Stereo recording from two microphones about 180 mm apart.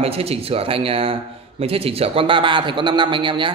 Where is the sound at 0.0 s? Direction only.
35° right (ahead or behind).